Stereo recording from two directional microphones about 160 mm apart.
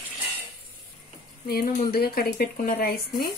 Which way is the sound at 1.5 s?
70° left (ahead or behind).